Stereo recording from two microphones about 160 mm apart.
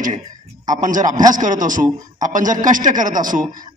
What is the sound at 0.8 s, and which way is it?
A man's voice, 55° right (ahead or behind).